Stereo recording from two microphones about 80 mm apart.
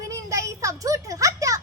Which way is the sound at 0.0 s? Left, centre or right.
Right.